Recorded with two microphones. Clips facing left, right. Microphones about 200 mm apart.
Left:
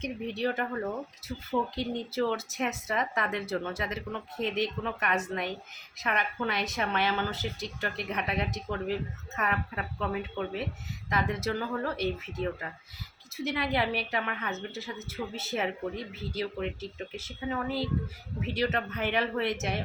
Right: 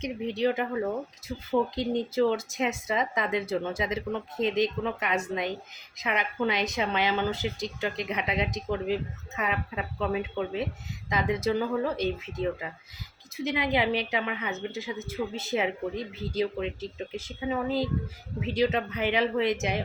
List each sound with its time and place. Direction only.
0.0 s speech: 15° right (ahead or behind)